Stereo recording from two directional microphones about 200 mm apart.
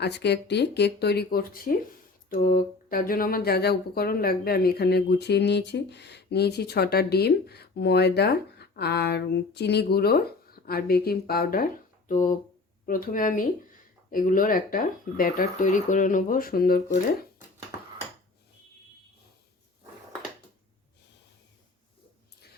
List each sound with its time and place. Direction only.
0.0 s speech: 55° left (ahead or behind)